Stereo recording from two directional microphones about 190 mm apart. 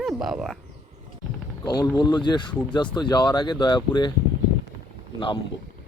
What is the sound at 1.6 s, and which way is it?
Speech, 20° left (ahead or behind).